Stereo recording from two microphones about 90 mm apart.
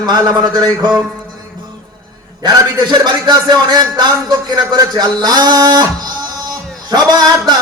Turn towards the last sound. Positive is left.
turn(degrees=-50)  # may be behind; listen again after turning